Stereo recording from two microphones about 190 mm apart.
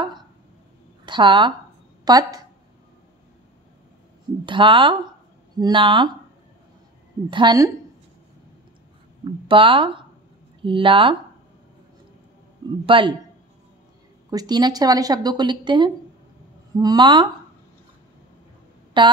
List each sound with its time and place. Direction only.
1.0 s speech: 25° right (ahead or behind)
4.5 s speech: 25° right (ahead or behind)
7.2 s speech: 25° right (ahead or behind)
9.5 s speech: 25° right (ahead or behind)
12.8 s speech: 25° right (ahead or behind)
14.3 s speech: 20° right (ahead or behind)
18.9 s a woman's voice: 25° right (ahead or behind)